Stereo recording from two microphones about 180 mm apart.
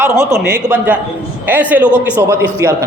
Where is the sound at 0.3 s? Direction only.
60° right (ahead or behind).